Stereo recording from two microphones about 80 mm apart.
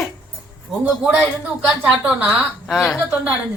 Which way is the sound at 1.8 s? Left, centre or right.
Centre.